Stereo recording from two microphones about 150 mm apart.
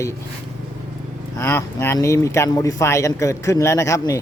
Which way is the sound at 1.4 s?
15° left (ahead or behind).